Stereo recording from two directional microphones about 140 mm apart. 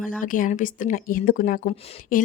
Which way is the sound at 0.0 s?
75° left (ahead or behind).